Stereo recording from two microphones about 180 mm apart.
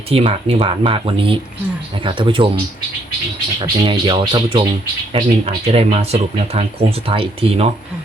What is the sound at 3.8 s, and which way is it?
Speech, 30° right (ahead or behind).